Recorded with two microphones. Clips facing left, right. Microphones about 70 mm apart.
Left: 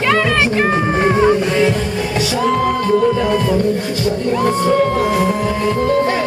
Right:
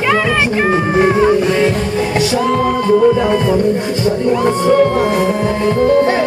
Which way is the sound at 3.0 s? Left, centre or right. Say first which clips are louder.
Right 3 dB; centre.